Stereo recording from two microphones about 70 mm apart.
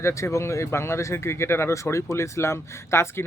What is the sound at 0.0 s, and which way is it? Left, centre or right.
Speech, left.